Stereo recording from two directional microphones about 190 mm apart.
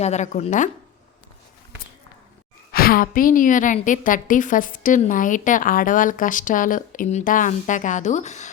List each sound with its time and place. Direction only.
0.0 s speech: 35° left (ahead or behind)
2.7 s a woman's voice: 50° left (ahead or behind)